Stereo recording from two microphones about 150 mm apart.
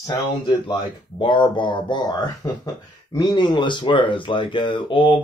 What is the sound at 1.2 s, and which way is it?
Speech, 30° left (ahead or behind).